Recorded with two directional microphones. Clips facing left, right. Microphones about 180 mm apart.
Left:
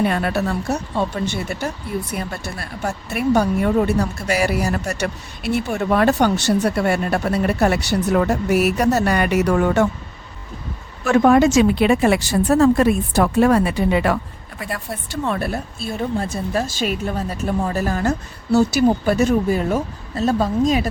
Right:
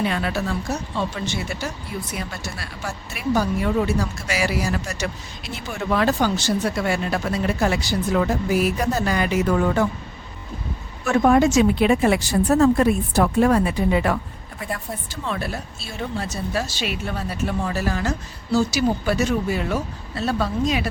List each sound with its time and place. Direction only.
0.0 s speech: 50° left (ahead or behind)
5.7 s speech: 50° left (ahead or behind); by 9.8 s 75° left (ahead or behind)
11.0 s speech: 90° left
15.2 s speech: 55° left (ahead or behind)